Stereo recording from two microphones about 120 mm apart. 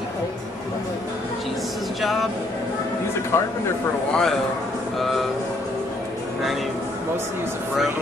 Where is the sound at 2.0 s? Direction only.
Centre (ahead or behind).